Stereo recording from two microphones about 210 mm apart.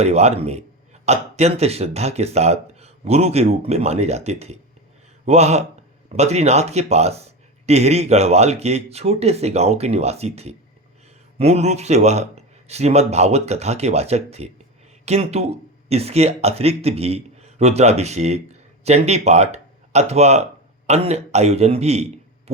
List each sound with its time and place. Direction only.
0.0 s a man's voice: 30° right (ahead or behind)